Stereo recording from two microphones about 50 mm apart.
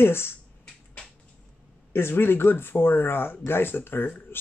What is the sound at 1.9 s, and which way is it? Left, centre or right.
Speech, left.